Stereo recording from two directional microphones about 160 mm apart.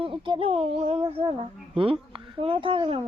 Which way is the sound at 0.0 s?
35° right (ahead or behind).